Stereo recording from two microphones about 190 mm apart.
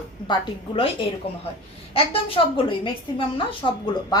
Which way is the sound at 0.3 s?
25° left (ahead or behind).